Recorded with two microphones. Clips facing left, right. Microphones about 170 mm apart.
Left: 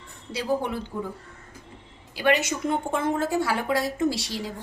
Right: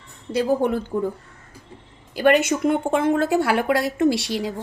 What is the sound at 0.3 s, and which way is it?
Speech, 50° right (ahead or behind).